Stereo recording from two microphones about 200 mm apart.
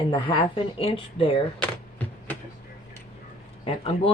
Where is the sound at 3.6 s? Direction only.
30° left (ahead or behind).